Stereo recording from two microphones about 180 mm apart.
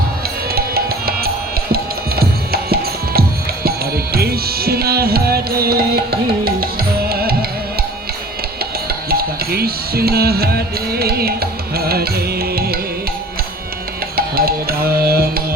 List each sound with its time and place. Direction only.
0.5 s music: 60° right (ahead or behind)
9.0 s music: 60° right (ahead or behind)
14.2 s music: 60° right (ahead or behind)